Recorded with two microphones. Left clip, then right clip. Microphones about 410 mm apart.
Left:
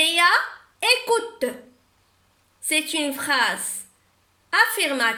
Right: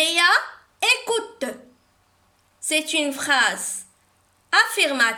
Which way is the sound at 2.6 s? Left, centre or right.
Right.